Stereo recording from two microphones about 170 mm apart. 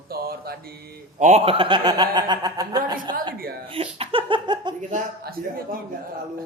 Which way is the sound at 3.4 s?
60° right (ahead or behind).